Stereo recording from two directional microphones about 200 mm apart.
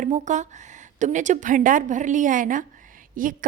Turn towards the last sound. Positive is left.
turn(degrees=-40)  # may be behind; listen again after turning